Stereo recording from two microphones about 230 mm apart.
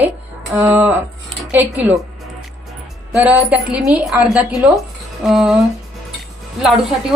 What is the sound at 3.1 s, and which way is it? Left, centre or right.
A woman's voice, centre.